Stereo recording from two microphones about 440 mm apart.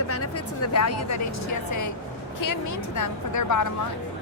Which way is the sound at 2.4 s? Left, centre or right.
Left.